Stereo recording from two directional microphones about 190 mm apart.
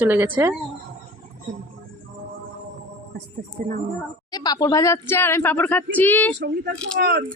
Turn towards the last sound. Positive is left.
turn(degrees=-65)  # may be behind; listen again after turning